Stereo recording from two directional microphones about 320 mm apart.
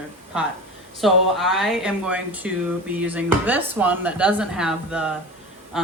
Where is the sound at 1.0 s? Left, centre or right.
Centre.